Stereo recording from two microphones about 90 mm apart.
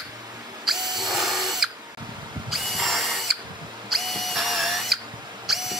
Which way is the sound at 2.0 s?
60° right (ahead or behind).